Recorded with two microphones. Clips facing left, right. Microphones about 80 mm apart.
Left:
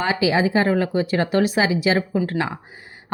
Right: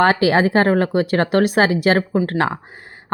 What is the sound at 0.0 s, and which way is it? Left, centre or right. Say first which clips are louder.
Speech: right 5 dB; right.